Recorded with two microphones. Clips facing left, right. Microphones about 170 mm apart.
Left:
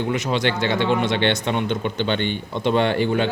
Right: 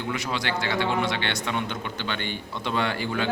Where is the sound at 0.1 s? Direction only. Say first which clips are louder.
Left 4 dB; 25° left (ahead or behind).